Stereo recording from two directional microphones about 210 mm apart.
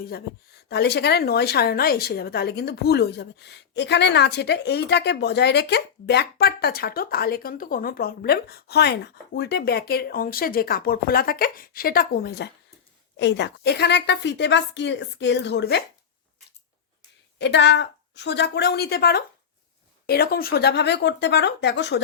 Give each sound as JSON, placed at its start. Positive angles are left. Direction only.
{"t": 0.7, "sound": "a woman's voice", "side_deg": 50}
{"t": 17.3, "sound": "a woman's voice", "side_deg": 55}